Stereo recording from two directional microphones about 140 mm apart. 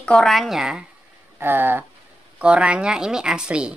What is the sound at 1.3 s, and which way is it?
A woman's voice, 15° right (ahead or behind).